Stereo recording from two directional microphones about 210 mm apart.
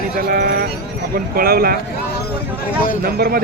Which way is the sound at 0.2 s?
45° right (ahead or behind).